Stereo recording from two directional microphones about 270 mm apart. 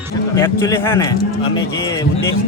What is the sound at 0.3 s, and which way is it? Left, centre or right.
A man's voice, centre.